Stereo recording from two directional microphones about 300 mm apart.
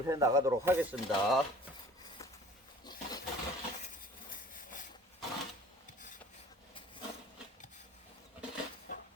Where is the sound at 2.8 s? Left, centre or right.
Centre.